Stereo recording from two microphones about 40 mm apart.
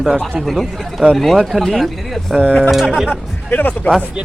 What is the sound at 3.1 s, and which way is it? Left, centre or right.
Speech, left.